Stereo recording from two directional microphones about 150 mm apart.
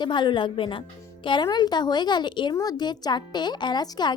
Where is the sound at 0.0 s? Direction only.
30° left (ahead or behind).